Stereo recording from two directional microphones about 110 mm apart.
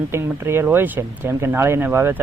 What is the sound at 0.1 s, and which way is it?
Speech, 25° right (ahead or behind).